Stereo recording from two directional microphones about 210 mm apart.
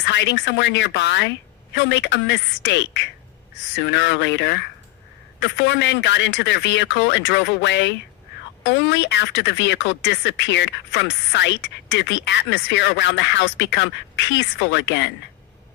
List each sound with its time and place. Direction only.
0.0 s speech: 60° left (ahead or behind)